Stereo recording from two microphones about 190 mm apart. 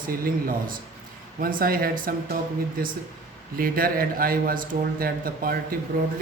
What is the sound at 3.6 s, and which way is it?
A man's voice, 50° right (ahead or behind).